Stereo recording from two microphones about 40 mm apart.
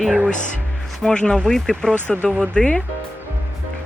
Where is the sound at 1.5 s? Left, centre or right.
Centre.